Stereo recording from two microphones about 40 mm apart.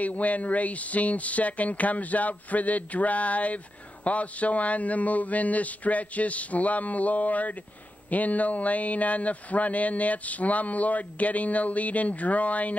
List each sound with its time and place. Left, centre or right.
0.0 s speech: left